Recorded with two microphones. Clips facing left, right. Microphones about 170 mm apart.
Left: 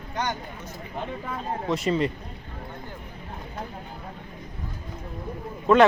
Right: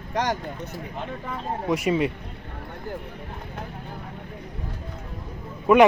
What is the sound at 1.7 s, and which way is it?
Speech, 10° right (ahead or behind).